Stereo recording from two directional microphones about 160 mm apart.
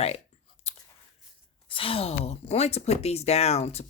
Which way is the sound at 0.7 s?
40° left (ahead or behind).